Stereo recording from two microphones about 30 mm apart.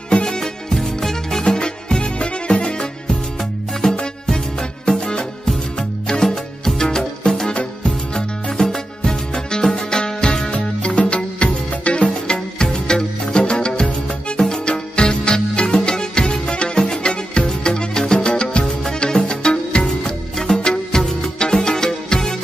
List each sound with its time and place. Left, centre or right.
0.1 s music: left
0.7 s music: centre
1.5 s music: left
2.0 s music: left
2.6 s music: left
6.2 s music: centre
7.2 s music: left
10.4 s music: left
17.0 s music: left
19.8 s music: centre